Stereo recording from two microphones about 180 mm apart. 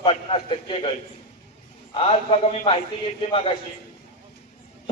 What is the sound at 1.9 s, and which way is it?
Speech, 30° left (ahead or behind).